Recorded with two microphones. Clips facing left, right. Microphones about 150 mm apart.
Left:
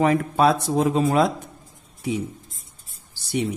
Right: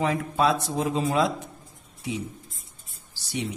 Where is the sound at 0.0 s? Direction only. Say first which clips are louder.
Left 5 dB; 60° left (ahead or behind).